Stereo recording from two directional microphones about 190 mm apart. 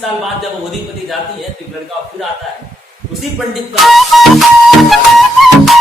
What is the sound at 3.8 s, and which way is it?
Music, centre (ahead or behind).